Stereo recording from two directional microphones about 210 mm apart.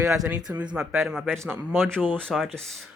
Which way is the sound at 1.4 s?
10° right (ahead or behind).